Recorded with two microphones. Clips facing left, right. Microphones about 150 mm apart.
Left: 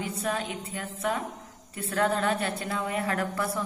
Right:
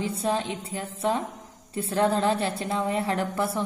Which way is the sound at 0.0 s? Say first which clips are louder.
Right 4 dB; 30° right (ahead or behind).